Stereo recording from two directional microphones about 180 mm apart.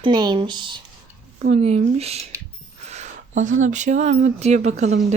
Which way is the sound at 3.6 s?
45° right (ahead or behind).